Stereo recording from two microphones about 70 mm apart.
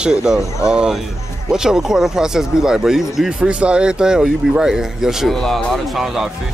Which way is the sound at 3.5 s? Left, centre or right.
Centre.